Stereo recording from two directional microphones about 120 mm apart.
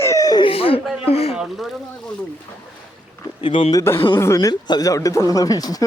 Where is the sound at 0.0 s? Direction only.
25° left (ahead or behind).